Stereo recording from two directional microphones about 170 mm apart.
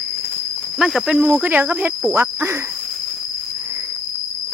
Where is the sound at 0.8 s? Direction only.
Centre (ahead or behind).